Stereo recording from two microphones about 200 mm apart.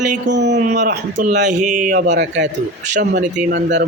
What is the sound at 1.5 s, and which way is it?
Speech, 40° right (ahead or behind).